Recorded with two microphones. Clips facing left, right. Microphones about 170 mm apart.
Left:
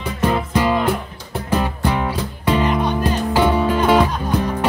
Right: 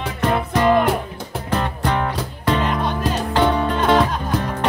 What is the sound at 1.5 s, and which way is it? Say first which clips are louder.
Music: left 2 dB; 5° left (ahead or behind).